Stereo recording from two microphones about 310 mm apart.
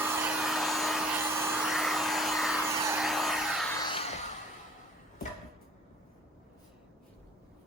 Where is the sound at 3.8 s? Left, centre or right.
Centre.